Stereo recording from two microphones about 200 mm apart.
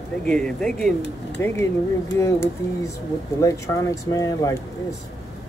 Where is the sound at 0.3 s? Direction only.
5° left (ahead or behind).